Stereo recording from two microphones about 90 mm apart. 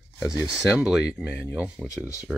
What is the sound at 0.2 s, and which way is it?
Speech, 35° left (ahead or behind).